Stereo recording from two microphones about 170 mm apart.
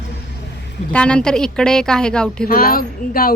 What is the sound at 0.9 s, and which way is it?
A woman's voice, 5° left (ahead or behind).